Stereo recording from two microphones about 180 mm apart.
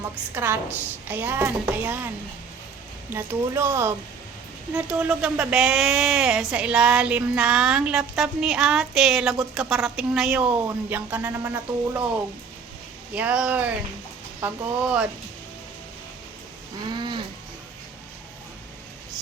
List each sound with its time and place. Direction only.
0.3 s a woman's voice: 10° right (ahead or behind)
3.1 s a woman's voice: 10° right (ahead or behind)
13.1 s a woman's voice: 5° right (ahead or behind)
16.9 s a sound: 25° right (ahead or behind)